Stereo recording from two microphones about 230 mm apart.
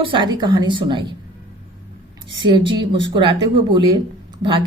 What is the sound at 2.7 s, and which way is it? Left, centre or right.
Speech, centre.